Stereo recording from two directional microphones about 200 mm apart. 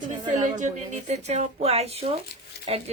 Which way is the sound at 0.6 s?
35° right (ahead or behind).